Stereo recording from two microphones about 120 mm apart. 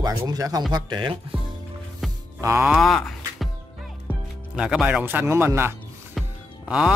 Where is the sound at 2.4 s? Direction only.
25° right (ahead or behind).